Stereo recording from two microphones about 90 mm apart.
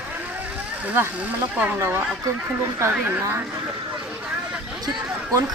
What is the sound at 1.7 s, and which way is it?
Speech, 30° right (ahead or behind).